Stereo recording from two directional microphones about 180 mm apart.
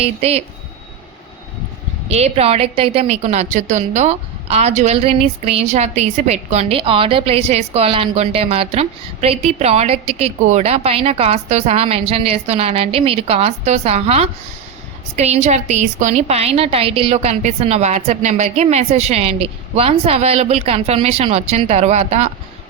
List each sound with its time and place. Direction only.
0.0 s a woman's voice: 35° right (ahead or behind)
2.0 s a woman's voice: 35° right (ahead or behind)